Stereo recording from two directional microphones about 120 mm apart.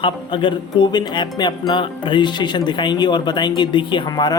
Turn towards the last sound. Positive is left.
turn(degrees=35)  # may be behind; listen again after turning